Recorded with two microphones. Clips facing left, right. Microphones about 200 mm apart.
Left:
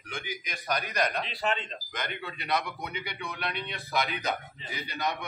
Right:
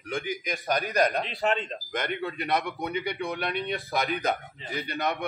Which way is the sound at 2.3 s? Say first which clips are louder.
Even; 50° right (ahead or behind).